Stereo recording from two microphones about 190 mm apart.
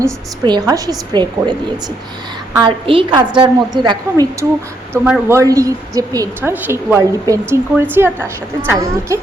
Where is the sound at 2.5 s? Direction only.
25° right (ahead or behind).